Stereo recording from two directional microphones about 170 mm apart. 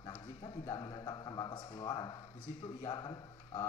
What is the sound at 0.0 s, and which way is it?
A man's voice, 25° left (ahead or behind).